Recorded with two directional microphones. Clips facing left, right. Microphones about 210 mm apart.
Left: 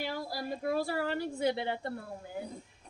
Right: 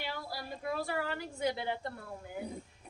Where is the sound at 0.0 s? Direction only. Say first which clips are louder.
Left 5 dB; 40° left (ahead or behind).